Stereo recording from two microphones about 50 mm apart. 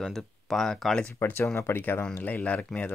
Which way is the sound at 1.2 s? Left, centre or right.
Left.